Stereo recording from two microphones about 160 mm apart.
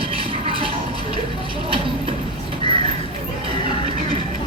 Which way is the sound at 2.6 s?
35° right (ahead or behind).